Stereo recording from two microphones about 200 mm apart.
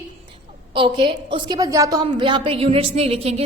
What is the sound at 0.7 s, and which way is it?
A woman's voice, 25° right (ahead or behind).